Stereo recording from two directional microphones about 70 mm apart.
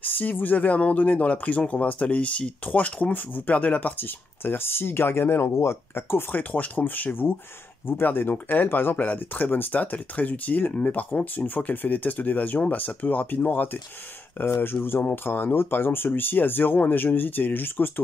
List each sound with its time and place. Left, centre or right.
0.0 s speech: left